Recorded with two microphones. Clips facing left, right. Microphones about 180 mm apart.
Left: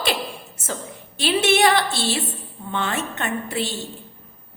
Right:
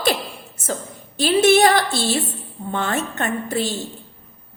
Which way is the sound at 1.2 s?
40° right (ahead or behind).